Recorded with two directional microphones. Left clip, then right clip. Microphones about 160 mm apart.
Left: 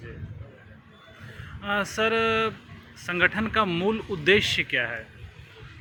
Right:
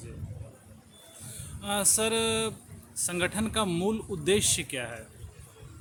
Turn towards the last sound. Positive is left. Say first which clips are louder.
# left 7 dB
turn(degrees=-20)  # may be behind; listen again after turning